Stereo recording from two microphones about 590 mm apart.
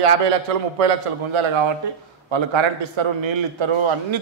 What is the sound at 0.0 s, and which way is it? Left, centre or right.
A man's voice, right.